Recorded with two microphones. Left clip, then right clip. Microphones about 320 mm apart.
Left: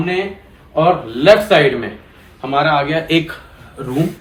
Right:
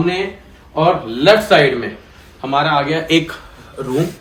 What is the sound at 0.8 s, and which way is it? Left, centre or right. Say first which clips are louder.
Speech: left 1 dB; centre.